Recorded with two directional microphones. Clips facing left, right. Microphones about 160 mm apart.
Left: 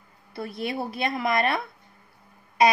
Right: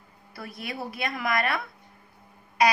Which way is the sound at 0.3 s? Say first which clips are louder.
Left 7 dB; 25° left (ahead or behind).